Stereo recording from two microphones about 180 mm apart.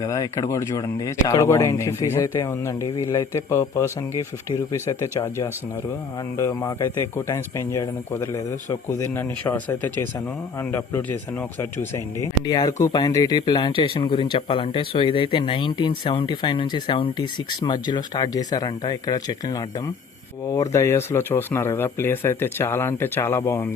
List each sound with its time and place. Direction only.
0.0 s speech: 20° left (ahead or behind)